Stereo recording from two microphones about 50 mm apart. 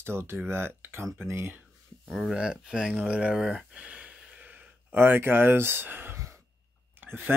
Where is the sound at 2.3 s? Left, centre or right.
Centre.